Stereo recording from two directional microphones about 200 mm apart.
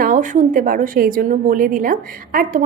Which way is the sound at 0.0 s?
40° right (ahead or behind).